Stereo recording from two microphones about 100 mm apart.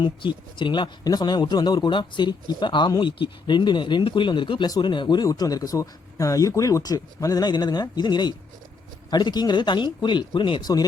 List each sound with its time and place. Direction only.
0.0 s a man's voice: 50° left (ahead or behind)